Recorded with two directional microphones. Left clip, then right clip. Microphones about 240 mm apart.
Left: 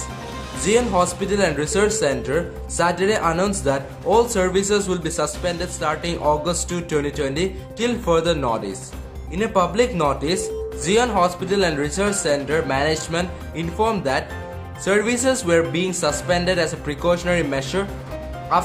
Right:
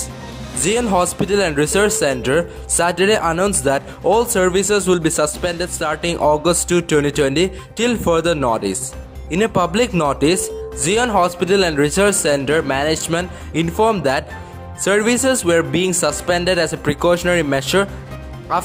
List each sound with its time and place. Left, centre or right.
0.6 s speech: right